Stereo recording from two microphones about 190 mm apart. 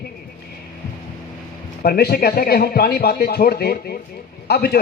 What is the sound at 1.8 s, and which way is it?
A man's voice, 55° left (ahead or behind).